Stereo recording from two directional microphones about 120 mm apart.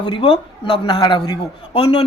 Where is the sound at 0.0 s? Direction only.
45° left (ahead or behind).